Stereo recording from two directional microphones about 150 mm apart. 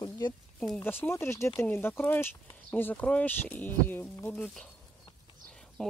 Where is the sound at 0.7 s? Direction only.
15° left (ahead or behind).